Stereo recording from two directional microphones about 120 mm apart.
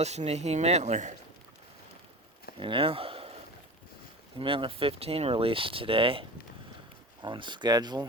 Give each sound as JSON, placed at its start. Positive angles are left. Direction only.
{"t": 0.0, "sound": "speech", "side_deg": -65}
{"t": 2.6, "sound": "speech", "side_deg": -45}
{"t": 4.4, "sound": "speech", "side_deg": -45}